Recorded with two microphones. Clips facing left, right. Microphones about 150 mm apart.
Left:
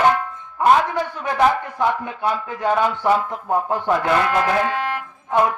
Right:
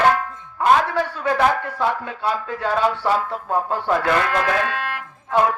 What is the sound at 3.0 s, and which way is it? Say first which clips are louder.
Speech: left 2 dB; 15° left (ahead or behind).